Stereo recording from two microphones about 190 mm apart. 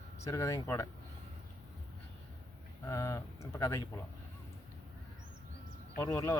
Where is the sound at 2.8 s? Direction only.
15° left (ahead or behind).